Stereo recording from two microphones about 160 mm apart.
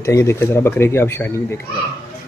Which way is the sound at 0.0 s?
20° left (ahead or behind).